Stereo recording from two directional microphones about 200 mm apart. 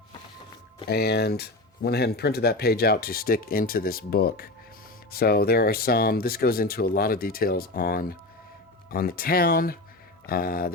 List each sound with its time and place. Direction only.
0.9 s speech: 55° left (ahead or behind)